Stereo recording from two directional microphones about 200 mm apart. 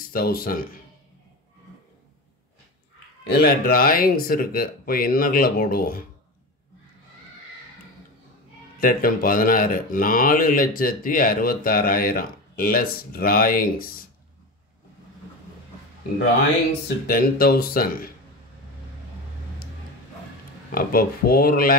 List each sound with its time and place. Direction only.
0.1 s speech: 50° left (ahead or behind)
3.3 s speech: 50° left (ahead or behind)
8.7 s speech: 45° left (ahead or behind)
17.0 s speech: 50° left (ahead or behind)
20.7 s speech: 45° left (ahead or behind)